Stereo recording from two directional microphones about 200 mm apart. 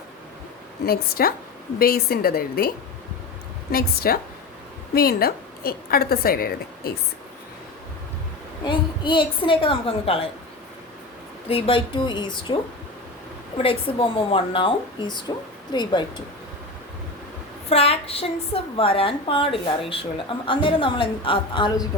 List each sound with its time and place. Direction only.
0.9 s a woman's voice: 50° left (ahead or behind)
8.6 s a woman's voice: 25° left (ahead or behind)
11.4 s a woman's voice: 30° left (ahead or behind)
17.7 s a woman's voice: 30° left (ahead or behind)